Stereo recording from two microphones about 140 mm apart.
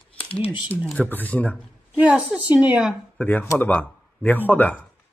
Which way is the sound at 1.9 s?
10° right (ahead or behind).